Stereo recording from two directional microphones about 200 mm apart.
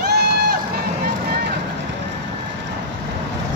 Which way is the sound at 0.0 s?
55° right (ahead or behind).